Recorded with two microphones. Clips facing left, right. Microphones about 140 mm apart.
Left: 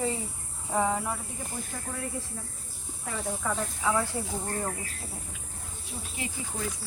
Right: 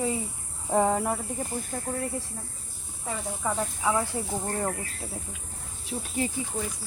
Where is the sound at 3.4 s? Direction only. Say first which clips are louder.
Right 3 dB; 15° right (ahead or behind).